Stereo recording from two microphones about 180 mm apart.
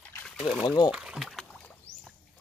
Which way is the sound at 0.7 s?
25° left (ahead or behind).